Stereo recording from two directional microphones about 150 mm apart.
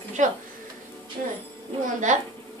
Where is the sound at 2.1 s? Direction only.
55° right (ahead or behind).